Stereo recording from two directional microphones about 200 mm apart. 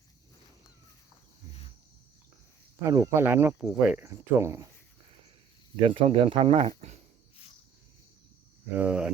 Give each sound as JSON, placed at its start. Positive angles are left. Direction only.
{"t": 2.8, "sound": "speech", "side_deg": -15}
{"t": 5.9, "sound": "speech", "side_deg": -30}
{"t": 8.7, "sound": "speech", "side_deg": -5}